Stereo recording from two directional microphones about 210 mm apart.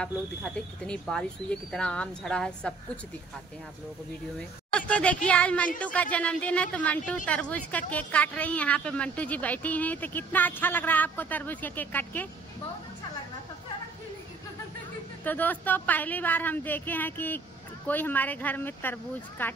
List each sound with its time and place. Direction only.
0.0 s speech: 5° left (ahead or behind)
4.7 s a woman's voice: 5° left (ahead or behind)
15.2 s a woman's voice: 10° left (ahead or behind)